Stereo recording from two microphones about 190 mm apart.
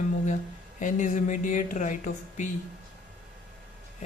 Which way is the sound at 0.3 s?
40° left (ahead or behind).